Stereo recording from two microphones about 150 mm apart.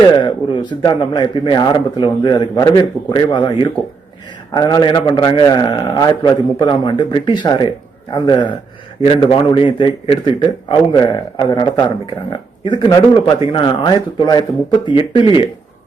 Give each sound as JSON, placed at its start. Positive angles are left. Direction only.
{"t": 0.2, "sound": "a man's voice", "side_deg": 30}